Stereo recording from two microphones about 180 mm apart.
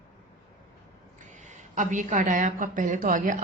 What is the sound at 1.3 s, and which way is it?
A woman's voice, 40° right (ahead or behind).